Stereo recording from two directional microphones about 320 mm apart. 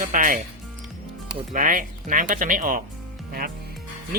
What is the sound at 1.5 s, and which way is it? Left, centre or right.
Speech, right.